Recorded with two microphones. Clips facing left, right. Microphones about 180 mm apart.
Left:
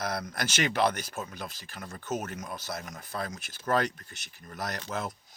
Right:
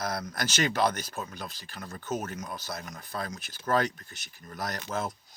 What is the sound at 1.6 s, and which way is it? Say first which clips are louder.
Speech: right 1 dB; 45° left (ahead or behind).